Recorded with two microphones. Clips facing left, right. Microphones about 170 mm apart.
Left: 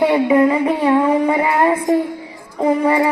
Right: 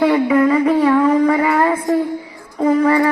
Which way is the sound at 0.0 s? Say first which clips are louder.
Even; 25° left (ahead or behind).